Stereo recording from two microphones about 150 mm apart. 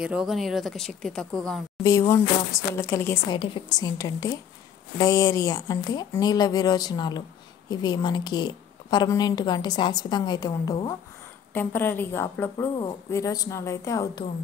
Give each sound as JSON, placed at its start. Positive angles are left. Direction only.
{"t": 0.0, "sound": "speech", "side_deg": -5}
{"t": 1.8, "sound": "a woman's voice", "side_deg": 20}
{"t": 3.3, "sound": "a woman's voice", "side_deg": 35}